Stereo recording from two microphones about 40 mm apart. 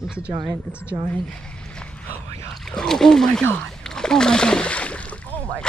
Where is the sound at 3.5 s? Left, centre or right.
Centre; by 5.1 s left.